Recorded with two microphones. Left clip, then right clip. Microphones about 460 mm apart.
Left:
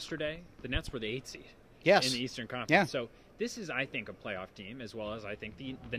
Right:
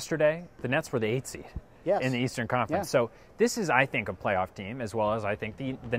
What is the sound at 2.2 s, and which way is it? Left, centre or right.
Speech, right.